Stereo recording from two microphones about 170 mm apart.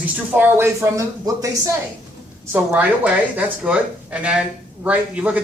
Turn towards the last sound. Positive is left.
turn(degrees=-5)  # may be behind; listen again after turning